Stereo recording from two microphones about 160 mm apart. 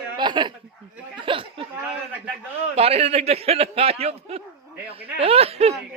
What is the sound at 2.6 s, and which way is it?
A man's voice, 40° right (ahead or behind).